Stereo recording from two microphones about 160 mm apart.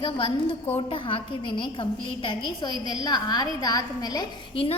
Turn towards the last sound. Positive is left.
turn(degrees=30)  # may be behind; listen again after turning